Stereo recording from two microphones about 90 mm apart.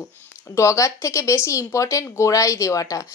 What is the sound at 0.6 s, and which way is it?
Speech, 35° left (ahead or behind).